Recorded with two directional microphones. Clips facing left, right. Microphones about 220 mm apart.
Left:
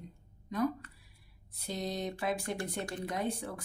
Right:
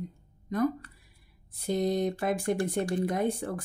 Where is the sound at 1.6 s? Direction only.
50° right (ahead or behind).